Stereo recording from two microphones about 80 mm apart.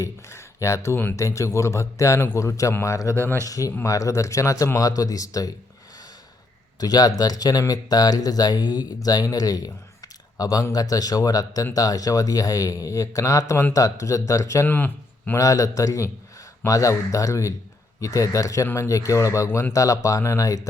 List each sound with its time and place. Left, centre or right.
0.0 s a sound: left
1.1 s a man's voice: left
6.7 s a man's voice: left
14.7 s speech: left
15.4 s a man's voice: left
19.5 s speech: left
19.7 s speech: left